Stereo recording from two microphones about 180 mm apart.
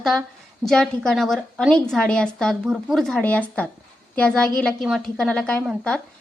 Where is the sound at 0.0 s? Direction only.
Centre (ahead or behind).